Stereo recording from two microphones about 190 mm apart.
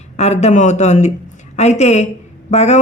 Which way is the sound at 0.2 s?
35° left (ahead or behind).